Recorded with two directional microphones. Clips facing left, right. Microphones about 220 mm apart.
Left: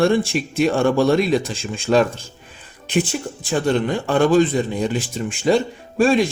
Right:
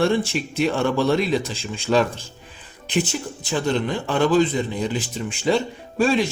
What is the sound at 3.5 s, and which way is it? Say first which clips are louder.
Speech: left 3 dB; 50° left (ahead or behind).